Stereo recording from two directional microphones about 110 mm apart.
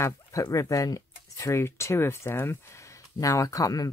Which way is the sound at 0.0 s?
30° left (ahead or behind).